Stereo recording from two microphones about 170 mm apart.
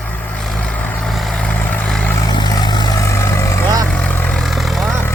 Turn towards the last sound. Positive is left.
turn(degrees=0)  # may be behind; listen again after turning